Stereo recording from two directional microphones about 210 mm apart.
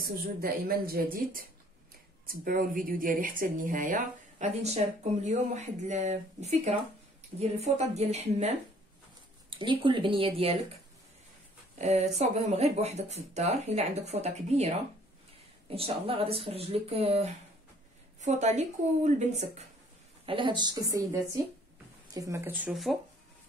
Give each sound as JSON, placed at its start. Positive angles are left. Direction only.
{"t": 0.4, "sound": "speech", "side_deg": -45}
{"t": 9.5, "sound": "speech", "side_deg": -25}
{"t": 11.8, "sound": "speech", "side_deg": -30}
{"t": 15.7, "sound": "speech", "side_deg": -25}